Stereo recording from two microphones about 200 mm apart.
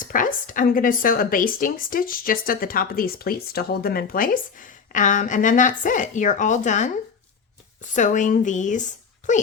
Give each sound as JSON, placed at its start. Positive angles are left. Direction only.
{"t": 0.0, "sound": "speech", "side_deg": 40}